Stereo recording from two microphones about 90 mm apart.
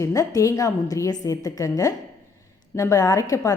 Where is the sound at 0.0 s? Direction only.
40° left (ahead or behind).